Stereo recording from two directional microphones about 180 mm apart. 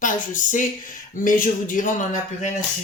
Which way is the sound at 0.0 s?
45° left (ahead or behind).